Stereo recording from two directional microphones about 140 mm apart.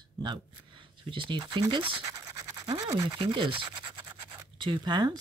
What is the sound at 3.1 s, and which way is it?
Speech, 40° right (ahead or behind).